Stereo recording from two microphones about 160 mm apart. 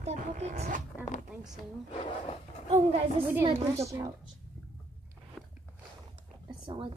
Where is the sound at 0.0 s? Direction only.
45° right (ahead or behind).